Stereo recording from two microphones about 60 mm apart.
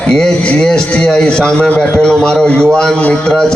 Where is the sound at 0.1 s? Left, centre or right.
Centre.